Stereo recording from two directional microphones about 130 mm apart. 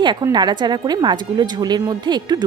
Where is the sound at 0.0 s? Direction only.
35° right (ahead or behind).